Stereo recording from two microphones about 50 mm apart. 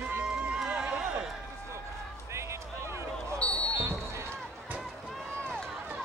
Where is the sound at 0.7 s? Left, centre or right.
Centre.